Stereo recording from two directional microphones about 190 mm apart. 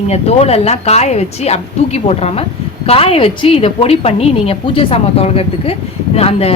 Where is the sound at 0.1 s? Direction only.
35° left (ahead or behind).